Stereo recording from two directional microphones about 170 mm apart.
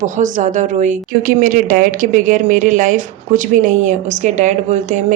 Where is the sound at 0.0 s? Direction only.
50° right (ahead or behind).